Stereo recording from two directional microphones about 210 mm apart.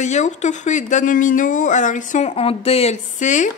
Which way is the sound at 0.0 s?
35° left (ahead or behind).